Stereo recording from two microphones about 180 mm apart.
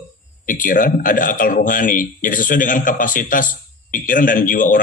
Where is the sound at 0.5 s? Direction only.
50° left (ahead or behind).